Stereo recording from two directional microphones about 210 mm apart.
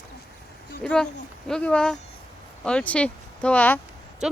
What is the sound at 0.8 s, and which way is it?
Speech, 5° left (ahead or behind).